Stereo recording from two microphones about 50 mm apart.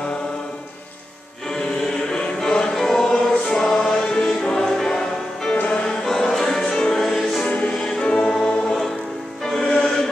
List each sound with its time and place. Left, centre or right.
2.1 s choir: centre
5.6 s music: left
5.9 s music: centre
7.4 s music: left
8.5 s choir: centre
9.4 s music: centre